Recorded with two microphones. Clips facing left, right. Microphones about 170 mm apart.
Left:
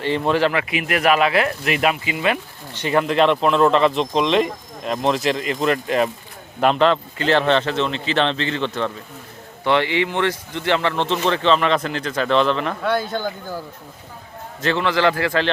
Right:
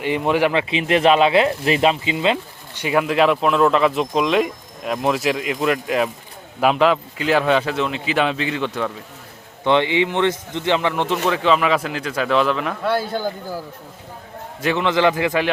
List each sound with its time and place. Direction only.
0.0 s speech: 10° right (ahead or behind)
0.7 s speech: 25° right (ahead or behind)
2.8 s speech: 5° right (ahead or behind)
9.6 s speech: 20° right (ahead or behind)
14.6 s speech: 15° right (ahead or behind)